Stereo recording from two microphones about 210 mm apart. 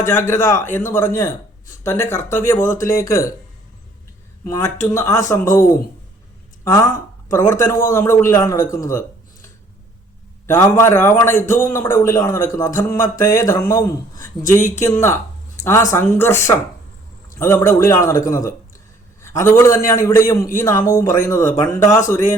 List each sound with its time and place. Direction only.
0.0 s speech: 10° left (ahead or behind)
4.4 s speech: 15° left (ahead or behind)
6.7 s speech: 15° left (ahead or behind)
10.4 s a man's voice: 15° left (ahead or behind)